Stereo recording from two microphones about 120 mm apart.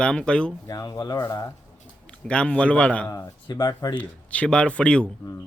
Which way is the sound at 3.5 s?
30° left (ahead or behind).